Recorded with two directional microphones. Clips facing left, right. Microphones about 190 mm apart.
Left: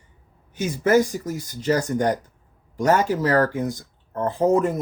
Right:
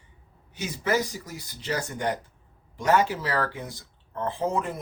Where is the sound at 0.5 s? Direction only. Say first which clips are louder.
Left 8 dB; 50° left (ahead or behind).